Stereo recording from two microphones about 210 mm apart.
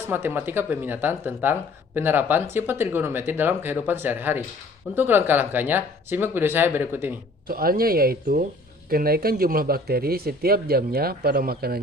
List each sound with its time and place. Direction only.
0.1 s speech: 10° right (ahead or behind)
7.4 s speech: 45° right (ahead or behind)